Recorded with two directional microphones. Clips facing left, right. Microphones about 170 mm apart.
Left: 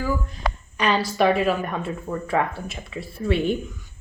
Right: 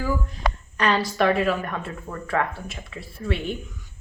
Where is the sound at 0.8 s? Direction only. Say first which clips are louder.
Left 1 dB; 15° left (ahead or behind).